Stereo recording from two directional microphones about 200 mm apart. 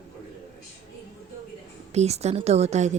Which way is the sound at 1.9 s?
35° right (ahead or behind).